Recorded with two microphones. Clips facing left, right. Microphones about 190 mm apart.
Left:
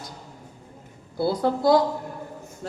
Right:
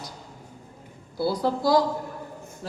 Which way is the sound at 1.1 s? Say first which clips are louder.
Left 2 dB; 55° left (ahead or behind).